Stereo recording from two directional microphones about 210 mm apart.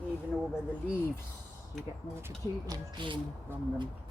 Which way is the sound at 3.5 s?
10° right (ahead or behind).